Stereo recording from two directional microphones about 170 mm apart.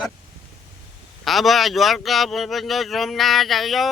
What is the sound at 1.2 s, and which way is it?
Speech, centre (ahead or behind).